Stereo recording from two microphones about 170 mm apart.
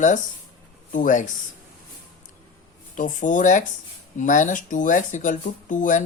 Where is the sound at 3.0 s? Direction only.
50° left (ahead or behind).